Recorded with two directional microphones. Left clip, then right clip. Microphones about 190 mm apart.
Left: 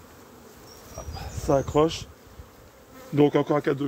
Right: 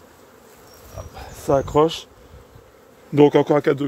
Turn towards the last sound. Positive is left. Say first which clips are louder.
# right 7 dB
turn(degrees=-50)  # may be behind; listen again after turning